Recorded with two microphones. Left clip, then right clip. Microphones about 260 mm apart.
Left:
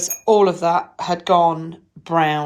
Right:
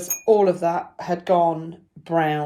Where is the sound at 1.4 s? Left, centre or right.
Left.